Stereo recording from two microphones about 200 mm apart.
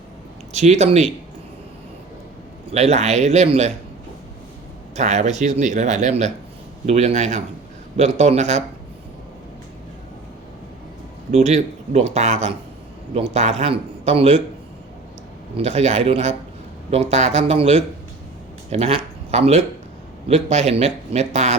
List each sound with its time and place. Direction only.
0.5 s speech: 35° right (ahead or behind)
2.7 s speech: 35° right (ahead or behind)
4.9 s speech: 35° right (ahead or behind)
11.3 s speech: 35° right (ahead or behind)
15.5 s speech: 30° right (ahead or behind)